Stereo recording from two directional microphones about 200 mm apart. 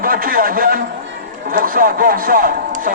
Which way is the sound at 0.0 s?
45° right (ahead or behind).